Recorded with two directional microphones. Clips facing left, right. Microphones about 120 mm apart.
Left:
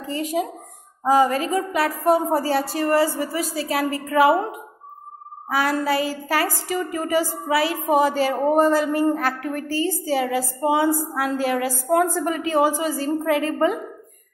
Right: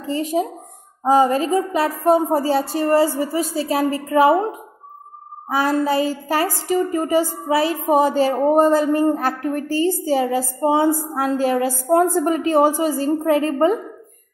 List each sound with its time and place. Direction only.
0.0 s a woman's voice: 30° right (ahead or behind)
5.5 s a woman's voice: 25° right (ahead or behind)